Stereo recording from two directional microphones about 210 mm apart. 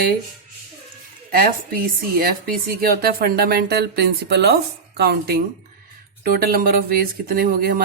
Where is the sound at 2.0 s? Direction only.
45° right (ahead or behind).